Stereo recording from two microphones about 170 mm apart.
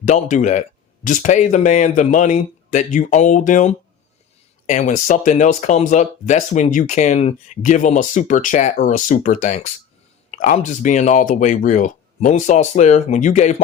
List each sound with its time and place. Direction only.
0.1 s speech: 45° left (ahead or behind)